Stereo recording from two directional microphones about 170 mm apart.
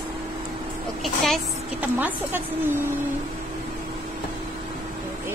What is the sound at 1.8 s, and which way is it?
Speech, 10° right (ahead or behind).